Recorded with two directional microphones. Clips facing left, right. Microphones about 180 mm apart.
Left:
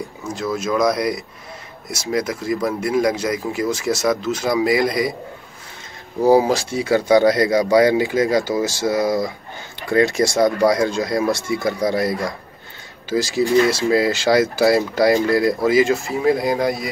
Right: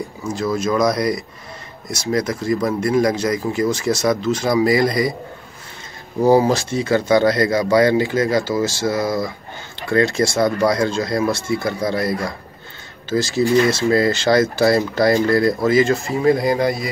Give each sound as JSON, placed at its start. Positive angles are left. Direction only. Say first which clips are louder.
{"t": 0.2, "sound": "speech", "louder": "right 3 dB", "side_deg": 0}
{"t": 6.2, "sound": "speech", "louder": "even", "side_deg": 5}